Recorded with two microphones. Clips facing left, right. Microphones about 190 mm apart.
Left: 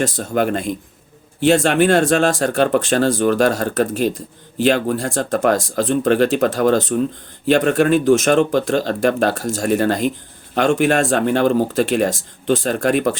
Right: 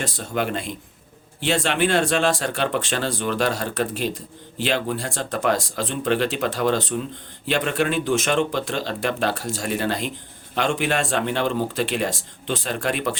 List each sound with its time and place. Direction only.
0.0 s speech: 45° left (ahead or behind)